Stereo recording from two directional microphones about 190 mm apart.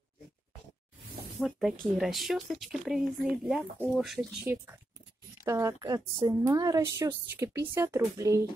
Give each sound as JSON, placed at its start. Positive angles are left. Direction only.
{"t": 1.4, "sound": "speech", "side_deg": 0}
{"t": 5.4, "sound": "a woman's voice", "side_deg": -15}